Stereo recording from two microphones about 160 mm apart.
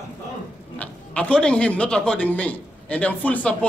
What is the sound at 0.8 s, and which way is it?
A man's voice, 5° left (ahead or behind).